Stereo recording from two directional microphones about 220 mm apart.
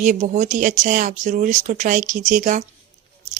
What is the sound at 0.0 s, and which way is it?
Speech, 35° right (ahead or behind).